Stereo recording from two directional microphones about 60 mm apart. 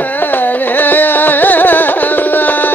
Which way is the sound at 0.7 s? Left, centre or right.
Left.